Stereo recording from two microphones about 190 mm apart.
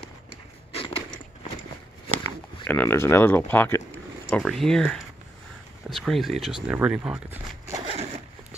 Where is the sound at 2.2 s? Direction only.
10° left (ahead or behind); by 7.7 s 10° right (ahead or behind).